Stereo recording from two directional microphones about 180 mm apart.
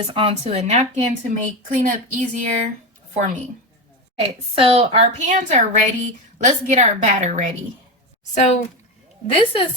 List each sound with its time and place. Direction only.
0.1 s a woman's voice: 30° right (ahead or behind)
4.2 s a woman's voice: 30° right (ahead or behind)
8.4 s a woman's voice: 40° left (ahead or behind)
9.3 s a woman's voice: 30° left (ahead or behind)